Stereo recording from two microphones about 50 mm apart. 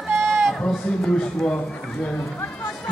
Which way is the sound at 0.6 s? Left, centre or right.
Centre.